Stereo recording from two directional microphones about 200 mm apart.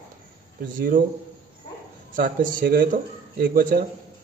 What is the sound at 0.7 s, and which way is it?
Speech, 45° right (ahead or behind).